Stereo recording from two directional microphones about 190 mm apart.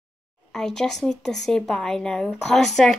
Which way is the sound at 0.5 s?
5° left (ahead or behind).